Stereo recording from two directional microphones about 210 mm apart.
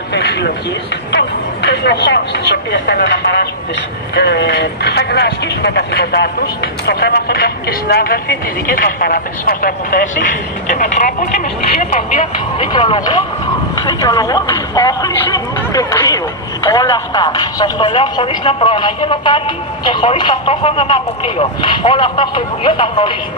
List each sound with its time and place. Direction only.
0.1 s a sound: 55° left (ahead or behind)
1.1 s speech: 55° left (ahead or behind); by 12.6 s 35° left (ahead or behind)
12.7 s speech: 20° left (ahead or behind)